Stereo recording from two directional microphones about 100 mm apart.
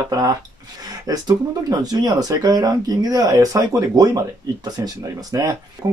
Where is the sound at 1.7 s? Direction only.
40° right (ahead or behind).